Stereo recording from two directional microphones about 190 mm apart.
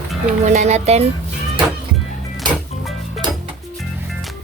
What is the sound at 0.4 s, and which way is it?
Speech, 40° right (ahead or behind).